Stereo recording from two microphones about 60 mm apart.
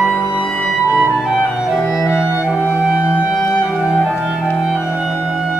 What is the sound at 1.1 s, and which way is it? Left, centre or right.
Music, centre.